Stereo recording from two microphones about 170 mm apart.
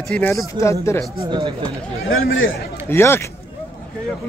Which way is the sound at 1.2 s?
30° right (ahead or behind).